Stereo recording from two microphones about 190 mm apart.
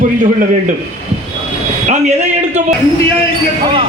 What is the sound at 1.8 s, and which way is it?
Speech, 35° right (ahead or behind).